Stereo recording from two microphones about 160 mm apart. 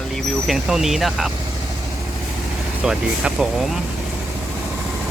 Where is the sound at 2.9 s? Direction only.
5° right (ahead or behind).